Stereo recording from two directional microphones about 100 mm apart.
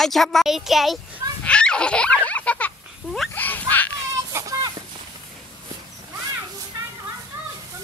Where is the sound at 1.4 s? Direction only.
10° left (ahead or behind).